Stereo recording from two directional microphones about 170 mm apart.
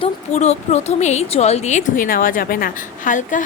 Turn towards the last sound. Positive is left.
turn(degrees=50)  # may be behind; listen again after turning